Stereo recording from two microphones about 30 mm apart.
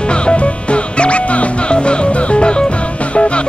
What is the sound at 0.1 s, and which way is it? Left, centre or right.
Music, left.